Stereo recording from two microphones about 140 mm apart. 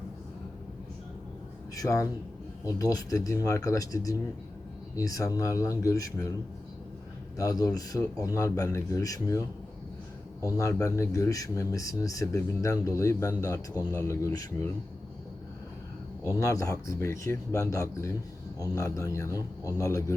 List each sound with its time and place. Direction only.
1.7 s a man's voice: 25° left (ahead or behind)
7.3 s a man's voice: 25° left (ahead or behind)
16.4 s a man's voice: 25° left (ahead or behind)